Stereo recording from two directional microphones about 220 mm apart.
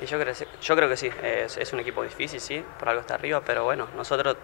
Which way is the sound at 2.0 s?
25° left (ahead or behind).